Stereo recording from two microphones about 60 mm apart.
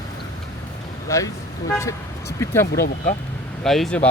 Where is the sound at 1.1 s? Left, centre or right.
Left.